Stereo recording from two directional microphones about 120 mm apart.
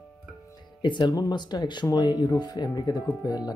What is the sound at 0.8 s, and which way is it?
Speech, 40° left (ahead or behind).